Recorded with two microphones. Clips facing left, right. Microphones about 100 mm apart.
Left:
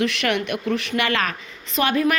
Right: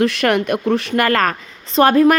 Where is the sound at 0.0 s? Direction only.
35° right (ahead or behind).